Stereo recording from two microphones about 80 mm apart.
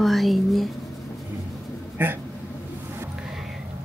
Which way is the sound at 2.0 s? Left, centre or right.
Right.